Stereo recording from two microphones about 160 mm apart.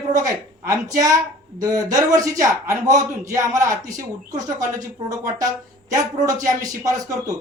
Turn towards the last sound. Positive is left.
turn(degrees=-20)  # may be behind; listen again after turning